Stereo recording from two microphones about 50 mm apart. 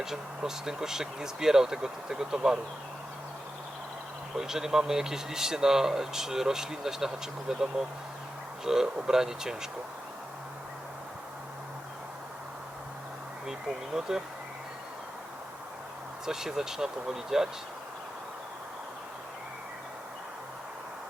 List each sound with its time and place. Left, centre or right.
0.0 s speech: centre
4.4 s speech: centre
13.5 s speech: centre
16.2 s speech: centre